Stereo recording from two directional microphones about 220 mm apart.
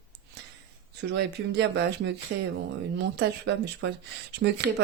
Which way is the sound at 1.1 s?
50° right (ahead or behind).